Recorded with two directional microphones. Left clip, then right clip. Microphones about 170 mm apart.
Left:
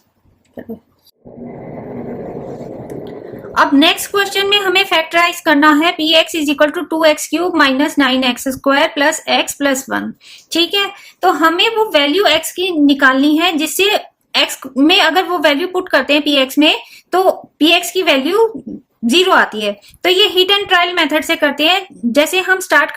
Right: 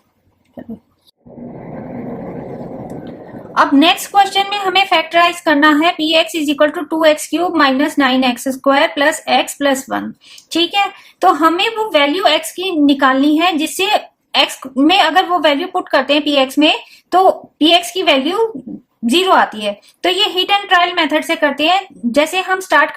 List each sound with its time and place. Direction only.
3.5 s a woman's voice: 15° left (ahead or behind)